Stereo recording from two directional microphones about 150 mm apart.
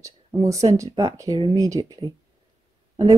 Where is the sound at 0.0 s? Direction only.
20° right (ahead or behind).